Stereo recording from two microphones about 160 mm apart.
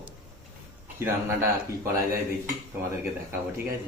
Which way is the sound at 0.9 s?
15° right (ahead or behind).